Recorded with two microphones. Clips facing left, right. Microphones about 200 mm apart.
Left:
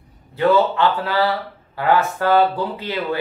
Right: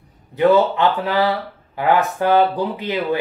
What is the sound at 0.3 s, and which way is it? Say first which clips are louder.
Speech: right 2 dB; 15° right (ahead or behind).